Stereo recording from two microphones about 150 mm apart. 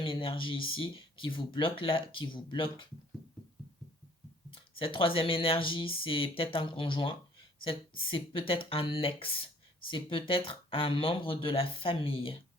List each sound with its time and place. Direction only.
0.0 s speech: 35° left (ahead or behind)
4.5 s speech: 35° left (ahead or behind)